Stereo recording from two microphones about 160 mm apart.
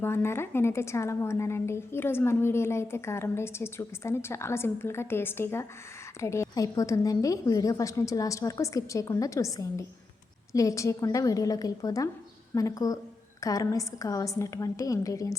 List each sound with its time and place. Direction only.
0.0 s a woman's voice: 15° left (ahead or behind)